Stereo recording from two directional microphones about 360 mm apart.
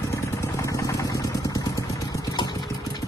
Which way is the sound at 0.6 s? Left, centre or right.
Centre.